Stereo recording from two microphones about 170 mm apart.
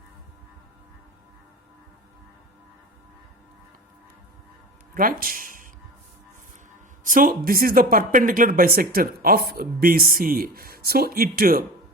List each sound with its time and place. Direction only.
4.9 s speech: 55° right (ahead or behind)
7.0 s speech: 55° right (ahead or behind)